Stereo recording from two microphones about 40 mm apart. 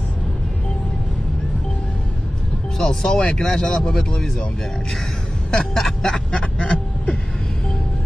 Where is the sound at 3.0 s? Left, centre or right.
Centre.